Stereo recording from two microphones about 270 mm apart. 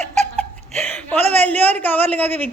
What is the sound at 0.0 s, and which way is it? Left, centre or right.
Laughter, right.